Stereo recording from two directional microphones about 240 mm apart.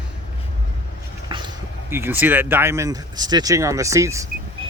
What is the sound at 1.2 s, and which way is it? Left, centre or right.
Speech, centre.